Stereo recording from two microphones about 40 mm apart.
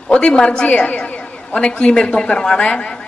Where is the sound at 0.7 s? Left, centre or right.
Left.